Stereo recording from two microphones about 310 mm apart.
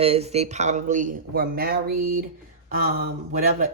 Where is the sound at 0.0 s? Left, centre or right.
Centre.